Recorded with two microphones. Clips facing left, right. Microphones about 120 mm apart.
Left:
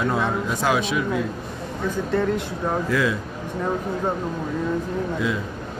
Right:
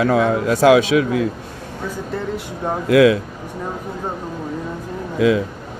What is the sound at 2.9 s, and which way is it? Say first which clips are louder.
Speech: right 14 dB; 90° right.